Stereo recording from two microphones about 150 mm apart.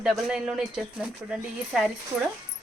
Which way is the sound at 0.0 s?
5° right (ahead or behind).